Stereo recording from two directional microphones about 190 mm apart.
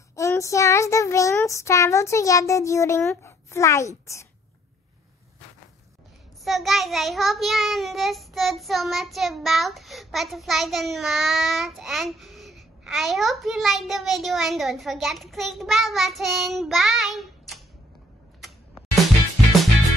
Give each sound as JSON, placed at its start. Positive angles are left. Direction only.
{"t": 0.1, "sound": "child singing", "side_deg": 15}
{"t": 6.4, "sound": "child singing", "side_deg": 0}